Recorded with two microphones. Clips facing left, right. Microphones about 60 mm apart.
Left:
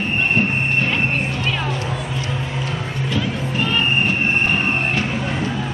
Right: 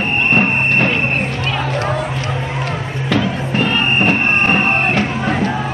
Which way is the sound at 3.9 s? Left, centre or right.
Right.